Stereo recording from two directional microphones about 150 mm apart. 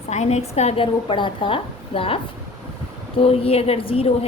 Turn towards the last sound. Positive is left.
turn(degrees=40)  # may be behind; listen again after turning